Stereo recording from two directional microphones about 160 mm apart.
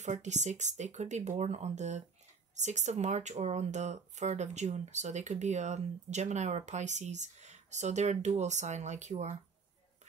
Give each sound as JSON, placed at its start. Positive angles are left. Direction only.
{"t": 0.0, "sound": "speech", "side_deg": -45}